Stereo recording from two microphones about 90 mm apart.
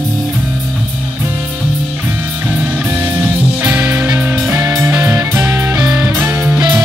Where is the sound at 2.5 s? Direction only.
20° right (ahead or behind).